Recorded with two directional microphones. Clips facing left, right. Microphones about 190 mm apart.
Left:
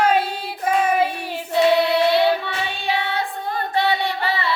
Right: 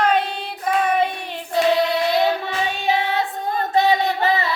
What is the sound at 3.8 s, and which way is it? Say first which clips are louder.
Music: right 4 dB; 45° right (ahead or behind).